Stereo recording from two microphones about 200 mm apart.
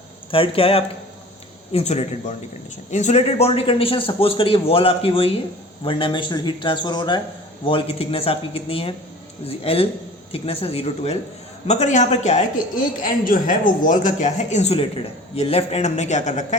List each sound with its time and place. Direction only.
0.3 s a man's voice: 25° left (ahead or behind)